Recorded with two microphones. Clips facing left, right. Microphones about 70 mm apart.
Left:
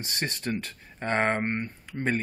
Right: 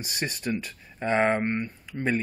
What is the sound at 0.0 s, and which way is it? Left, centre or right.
Speech, left.